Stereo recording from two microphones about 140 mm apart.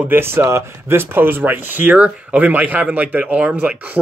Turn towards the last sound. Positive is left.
turn(degrees=-10)  # may be behind; listen again after turning